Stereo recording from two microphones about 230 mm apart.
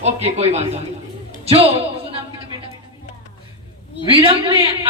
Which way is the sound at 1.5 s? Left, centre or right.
Right.